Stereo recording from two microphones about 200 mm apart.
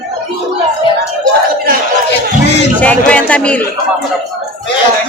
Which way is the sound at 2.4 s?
60° left (ahead or behind).